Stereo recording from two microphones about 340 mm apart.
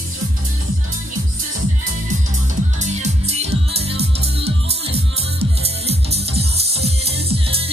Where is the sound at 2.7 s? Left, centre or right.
Centre.